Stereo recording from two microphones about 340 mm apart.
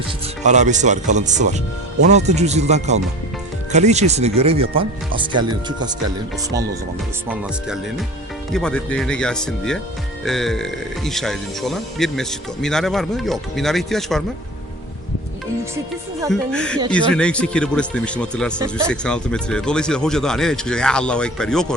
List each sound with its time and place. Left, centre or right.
0.4 s speech: right
7.3 s speech: centre
16.3 s speech: centre